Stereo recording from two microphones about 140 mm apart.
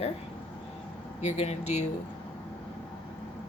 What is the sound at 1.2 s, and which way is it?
Speech, 50° left (ahead or behind).